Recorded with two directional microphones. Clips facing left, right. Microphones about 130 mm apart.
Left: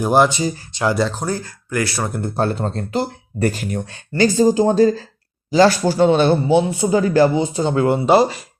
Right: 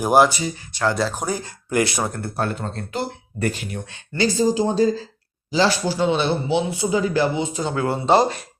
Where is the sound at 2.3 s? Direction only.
30° left (ahead or behind).